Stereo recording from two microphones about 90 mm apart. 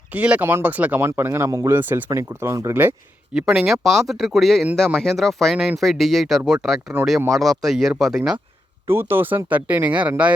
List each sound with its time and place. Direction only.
0.1 s speech: 15° right (ahead or behind); by 1.7 s 35° right (ahead or behind)
1.7 s speech: 20° right (ahead or behind)
3.3 s speech: 5° right (ahead or behind)
8.9 s speech: 25° right (ahead or behind)